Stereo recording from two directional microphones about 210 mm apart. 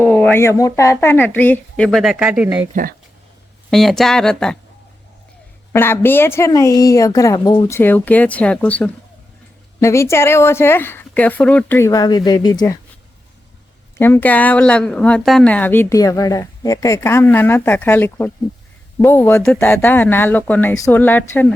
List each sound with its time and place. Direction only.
0.0 s a woman's voice: 10° left (ahead or behind)
2.8 s speech: 40° right (ahead or behind)
3.7 s a woman's voice: centre (ahead or behind)
5.7 s a woman's voice: 10° left (ahead or behind)
14.0 s a woman's voice: 10° left (ahead or behind)